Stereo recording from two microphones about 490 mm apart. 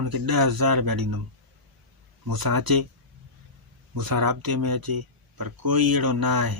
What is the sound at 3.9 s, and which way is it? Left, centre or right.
Speech, right.